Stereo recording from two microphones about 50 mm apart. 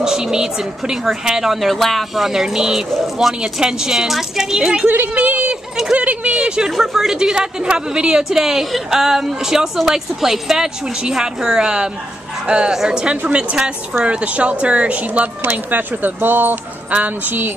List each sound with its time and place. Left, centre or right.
0.0 s a woman's voice: centre
4.8 s a woman's voice: right
5.1 s a sound: right
5.9 s speech: right
6.3 s a woman's voice: centre
6.7 s a woman's voice: centre; by 15.2 s right
15.4 s speech: right